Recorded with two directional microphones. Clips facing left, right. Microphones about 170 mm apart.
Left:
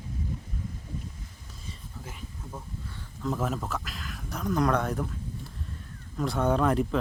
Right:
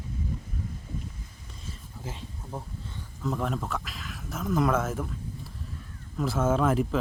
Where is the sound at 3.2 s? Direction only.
Centre (ahead or behind).